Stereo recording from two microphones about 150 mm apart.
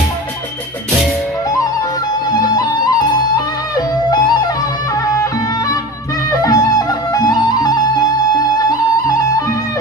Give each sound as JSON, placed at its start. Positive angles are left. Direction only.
{"t": 2.4, "sound": "music", "side_deg": 25}
{"t": 6.4, "sound": "music", "side_deg": 25}